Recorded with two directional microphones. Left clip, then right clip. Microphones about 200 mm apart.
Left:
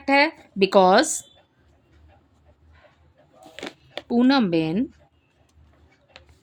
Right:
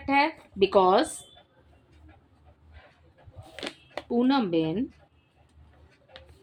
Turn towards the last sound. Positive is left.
turn(degrees=50)  # may be behind; listen again after turning